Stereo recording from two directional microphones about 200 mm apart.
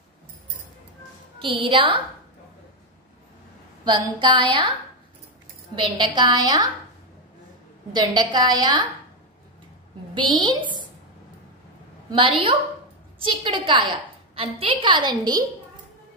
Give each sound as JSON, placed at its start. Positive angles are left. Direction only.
{"t": 1.4, "sound": "a woman's voice", "side_deg": -25}
{"t": 3.8, "sound": "a woman's voice", "side_deg": -25}
{"t": 5.8, "sound": "a woman's voice", "side_deg": -25}
{"t": 7.9, "sound": "a woman's voice", "side_deg": -20}
{"t": 10.1, "sound": "a woman's voice", "side_deg": -25}
{"t": 12.1, "sound": "a woman's voice", "side_deg": -25}